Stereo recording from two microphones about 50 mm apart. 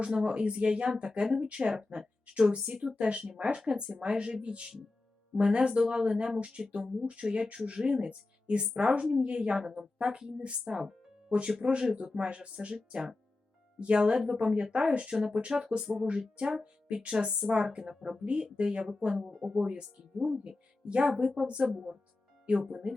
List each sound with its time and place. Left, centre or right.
0.0 s speech: centre
19.3 s speech: centre
19.6 s speech: right
20.1 s speech: centre